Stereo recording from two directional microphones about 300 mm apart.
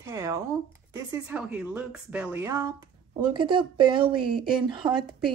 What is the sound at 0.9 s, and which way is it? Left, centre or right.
Speech, centre.